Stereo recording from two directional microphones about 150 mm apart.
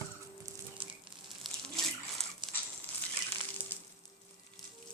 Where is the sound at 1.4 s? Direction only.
Centre (ahead or behind).